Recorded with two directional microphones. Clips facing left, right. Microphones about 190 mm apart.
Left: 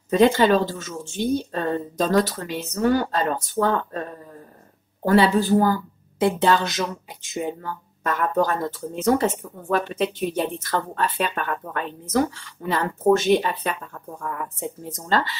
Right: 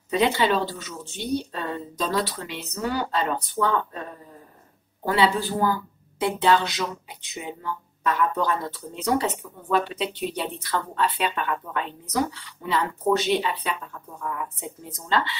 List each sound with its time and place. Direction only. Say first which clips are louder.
0.1 s speech: left 5 dB; 45° left (ahead or behind)
5.0 s speech: left 5 dB; 45° left (ahead or behind)